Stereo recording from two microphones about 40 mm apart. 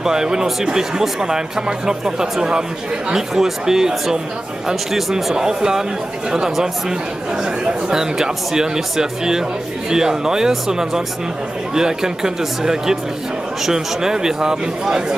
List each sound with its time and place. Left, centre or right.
0.0 s speech: centre
7.6 s speech: centre